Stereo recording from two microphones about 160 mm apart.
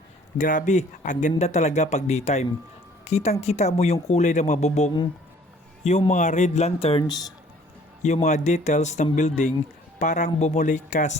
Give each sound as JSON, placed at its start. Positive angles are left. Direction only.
{"t": 0.3, "sound": "a woman's voice", "side_deg": 50}
{"t": 8.0, "sound": "speech", "side_deg": 45}